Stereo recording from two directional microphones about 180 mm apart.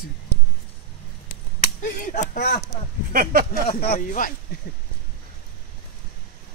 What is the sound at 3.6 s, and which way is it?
Speech, 55° left (ahead or behind).